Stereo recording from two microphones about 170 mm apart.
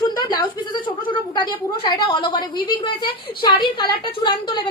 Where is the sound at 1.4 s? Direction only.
25° left (ahead or behind).